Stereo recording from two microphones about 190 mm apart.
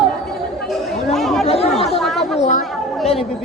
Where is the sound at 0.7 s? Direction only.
Centre (ahead or behind).